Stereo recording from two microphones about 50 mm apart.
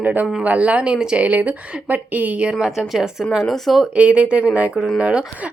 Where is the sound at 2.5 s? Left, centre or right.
Centre.